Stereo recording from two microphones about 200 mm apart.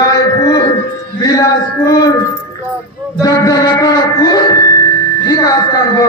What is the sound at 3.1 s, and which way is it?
A man's voice, 20° left (ahead or behind).